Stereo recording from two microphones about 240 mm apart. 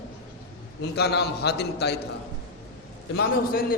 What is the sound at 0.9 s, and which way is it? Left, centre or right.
A man's voice, left.